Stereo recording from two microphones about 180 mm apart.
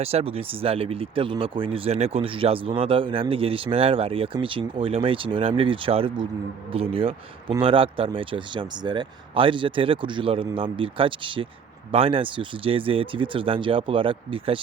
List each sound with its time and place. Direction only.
0.0 s speech: 35° right (ahead or behind)